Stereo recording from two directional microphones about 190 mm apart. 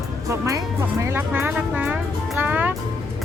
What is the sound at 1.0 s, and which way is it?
Speech, 15° right (ahead or behind).